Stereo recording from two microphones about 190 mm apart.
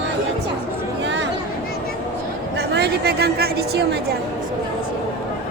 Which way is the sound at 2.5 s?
60° right (ahead or behind).